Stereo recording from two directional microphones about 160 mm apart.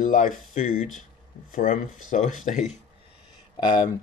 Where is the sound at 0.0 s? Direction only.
55° left (ahead or behind).